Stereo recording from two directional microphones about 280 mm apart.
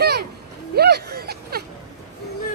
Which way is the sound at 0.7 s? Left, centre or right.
Right.